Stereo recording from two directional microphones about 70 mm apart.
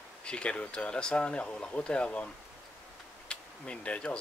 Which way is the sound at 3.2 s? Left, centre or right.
Centre.